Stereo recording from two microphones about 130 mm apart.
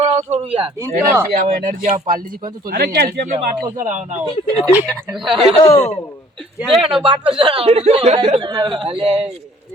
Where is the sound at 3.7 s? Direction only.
70° right (ahead or behind).